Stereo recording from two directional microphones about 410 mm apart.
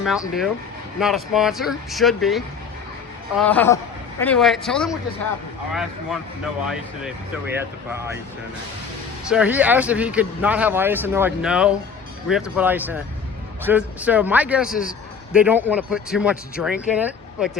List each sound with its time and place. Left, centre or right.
0.0 s speech: centre
9.3 s speech: centre
14.7 s a man's voice: centre
15.3 s speech: centre